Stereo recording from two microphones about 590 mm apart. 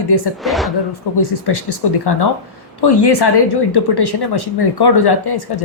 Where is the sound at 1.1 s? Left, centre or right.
Left.